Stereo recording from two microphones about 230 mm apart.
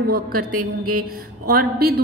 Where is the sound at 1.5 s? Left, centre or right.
Right.